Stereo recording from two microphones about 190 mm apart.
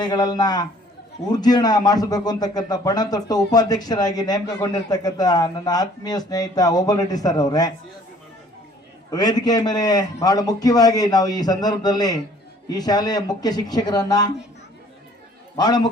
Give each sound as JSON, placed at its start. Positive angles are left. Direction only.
{"t": 0.0, "sound": "speech", "side_deg": 20}
{"t": 9.0, "sound": "speech", "side_deg": 20}
{"t": 15.5, "sound": "speech", "side_deg": 20}